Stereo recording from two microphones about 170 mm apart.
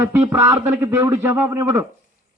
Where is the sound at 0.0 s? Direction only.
15° right (ahead or behind).